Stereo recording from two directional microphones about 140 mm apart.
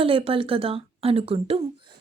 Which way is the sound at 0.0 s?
40° right (ahead or behind).